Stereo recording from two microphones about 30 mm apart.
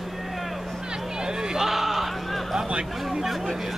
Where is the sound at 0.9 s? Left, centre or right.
Right.